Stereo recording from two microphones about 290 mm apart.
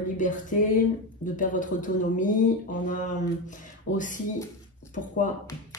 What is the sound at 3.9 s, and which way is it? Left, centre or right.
Speech, left.